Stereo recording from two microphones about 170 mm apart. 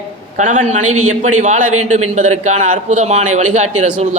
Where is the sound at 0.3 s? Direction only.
45° right (ahead or behind).